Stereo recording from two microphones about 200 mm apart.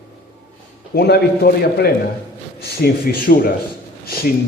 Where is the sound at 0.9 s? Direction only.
55° left (ahead or behind).